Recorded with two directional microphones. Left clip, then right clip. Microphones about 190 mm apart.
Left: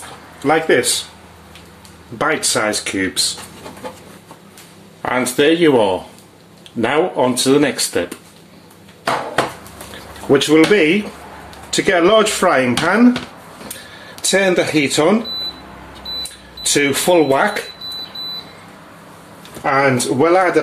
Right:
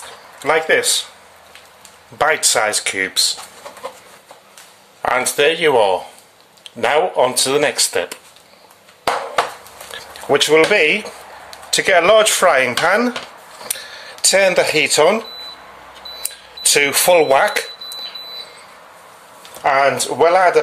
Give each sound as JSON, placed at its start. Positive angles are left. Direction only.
{"t": 0.4, "sound": "speech", "side_deg": -45}
{"t": 2.1, "sound": "speech", "side_deg": -45}
{"t": 5.0, "sound": "speech", "side_deg": -40}
{"t": 10.3, "sound": "speech", "side_deg": -45}
{"t": 14.2, "sound": "speech", "side_deg": -50}
{"t": 16.2, "sound": "speech", "side_deg": -50}
{"t": 19.6, "sound": "speech", "side_deg": -45}